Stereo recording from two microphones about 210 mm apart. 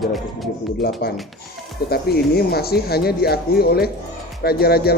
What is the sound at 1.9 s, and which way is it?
Speech, 50° left (ahead or behind).